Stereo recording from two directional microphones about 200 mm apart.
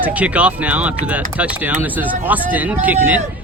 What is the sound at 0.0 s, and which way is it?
Speech, 5° right (ahead or behind).